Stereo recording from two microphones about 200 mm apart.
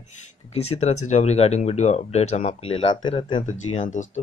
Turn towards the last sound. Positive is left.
turn(degrees=35)  # may be behind; listen again after turning